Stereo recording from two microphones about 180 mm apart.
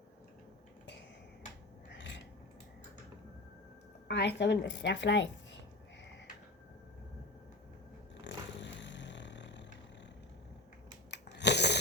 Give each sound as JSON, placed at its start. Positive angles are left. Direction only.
{"t": 1.9, "sound": "mechanisms", "side_deg": 85}
{"t": 4.1, "sound": "a woman's voice", "side_deg": 80}
{"t": 8.2, "sound": "vehicle", "side_deg": 80}
{"t": 11.1, "sound": "a sound", "side_deg": 75}